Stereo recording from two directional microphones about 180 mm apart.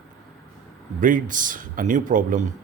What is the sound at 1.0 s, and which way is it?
Speech, 45° right (ahead or behind).